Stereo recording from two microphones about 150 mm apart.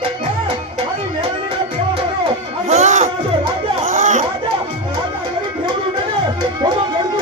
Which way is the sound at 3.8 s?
50° right (ahead or behind).